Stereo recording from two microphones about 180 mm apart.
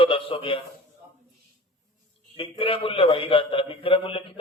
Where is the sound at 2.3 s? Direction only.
30° left (ahead or behind).